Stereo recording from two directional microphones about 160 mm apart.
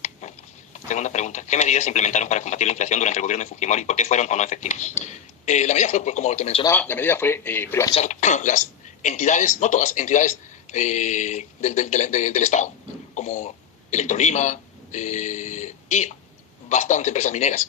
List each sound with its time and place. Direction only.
0.0 s speech: 45° left (ahead or behind)
6.7 s speech: 15° left (ahead or behind)
8.0 s speech: 50° left (ahead or behind)